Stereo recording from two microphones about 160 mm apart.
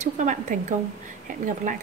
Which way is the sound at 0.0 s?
50° right (ahead or behind).